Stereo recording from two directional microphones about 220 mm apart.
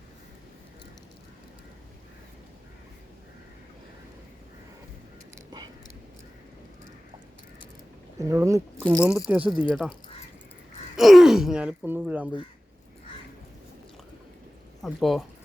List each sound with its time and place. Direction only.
5.3 s a sound: 20° right (ahead or behind)
8.2 s speech: 15° right (ahead or behind)
10.9 s speech: centre (ahead or behind)
14.8 s speech: centre (ahead or behind)